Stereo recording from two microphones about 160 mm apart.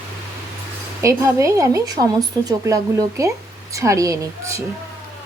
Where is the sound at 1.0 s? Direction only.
20° right (ahead or behind).